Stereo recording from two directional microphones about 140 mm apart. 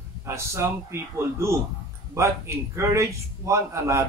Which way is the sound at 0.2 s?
20° right (ahead or behind).